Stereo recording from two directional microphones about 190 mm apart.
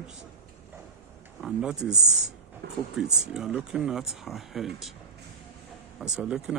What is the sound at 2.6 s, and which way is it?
Speech, 60° right (ahead or behind).